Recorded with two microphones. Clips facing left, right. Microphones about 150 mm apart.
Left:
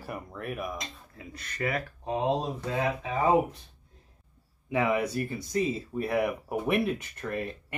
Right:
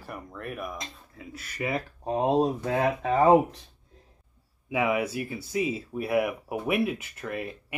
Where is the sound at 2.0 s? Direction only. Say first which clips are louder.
Right 2 dB; 45° right (ahead or behind).